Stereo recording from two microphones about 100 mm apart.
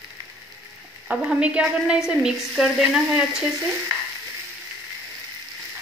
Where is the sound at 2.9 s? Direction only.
5° right (ahead or behind).